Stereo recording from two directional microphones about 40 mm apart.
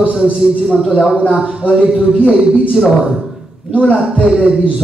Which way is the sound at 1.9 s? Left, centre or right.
Centre.